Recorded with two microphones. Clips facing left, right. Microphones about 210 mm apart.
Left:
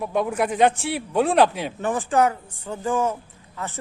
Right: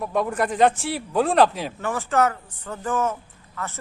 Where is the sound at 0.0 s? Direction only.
Centre (ahead or behind).